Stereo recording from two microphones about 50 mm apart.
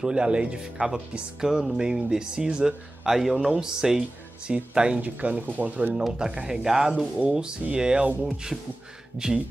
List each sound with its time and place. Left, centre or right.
0.0 s speech: centre
1.4 s music: centre
1.8 s speech: centre
4.7 s speech: right
6.1 s speech: centre